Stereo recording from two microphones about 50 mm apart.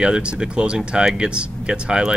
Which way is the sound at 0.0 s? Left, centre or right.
Centre.